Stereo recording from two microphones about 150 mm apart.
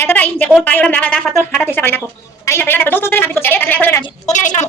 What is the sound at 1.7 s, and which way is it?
Speech, 15° left (ahead or behind).